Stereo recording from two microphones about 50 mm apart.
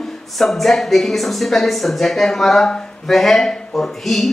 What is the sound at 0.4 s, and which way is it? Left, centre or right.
Speech, centre.